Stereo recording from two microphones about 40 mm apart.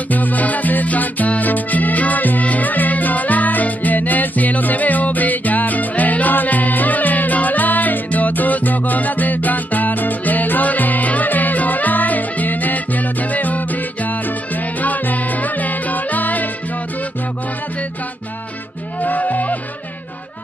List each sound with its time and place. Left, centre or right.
0.1 s music: left
18.9 s music: left